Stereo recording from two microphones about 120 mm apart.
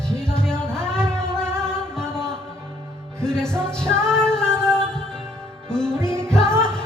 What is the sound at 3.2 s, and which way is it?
Music, 5° left (ahead or behind).